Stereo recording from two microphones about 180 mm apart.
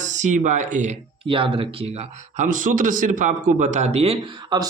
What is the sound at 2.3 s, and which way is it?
A man's voice, 45° right (ahead or behind).